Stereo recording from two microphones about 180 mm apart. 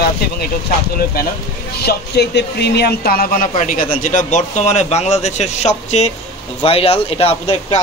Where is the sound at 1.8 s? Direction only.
65° left (ahead or behind).